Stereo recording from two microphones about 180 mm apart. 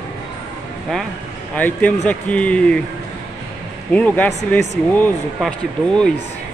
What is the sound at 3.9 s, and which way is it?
Speech, 10° left (ahead or behind).